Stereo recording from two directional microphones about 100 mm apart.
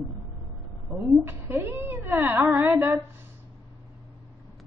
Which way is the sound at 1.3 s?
20° right (ahead or behind).